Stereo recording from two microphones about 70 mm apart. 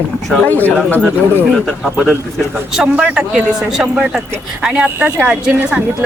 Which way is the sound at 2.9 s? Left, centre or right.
Right.